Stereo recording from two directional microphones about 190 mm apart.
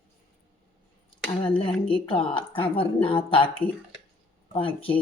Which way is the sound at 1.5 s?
30° left (ahead or behind).